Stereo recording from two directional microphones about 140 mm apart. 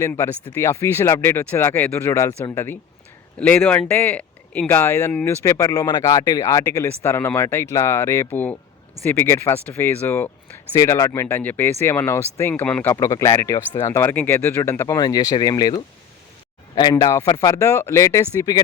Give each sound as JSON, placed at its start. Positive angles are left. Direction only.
{"t": 0.5, "sound": "speech", "side_deg": 20}
{"t": 12.9, "sound": "speech", "side_deg": 20}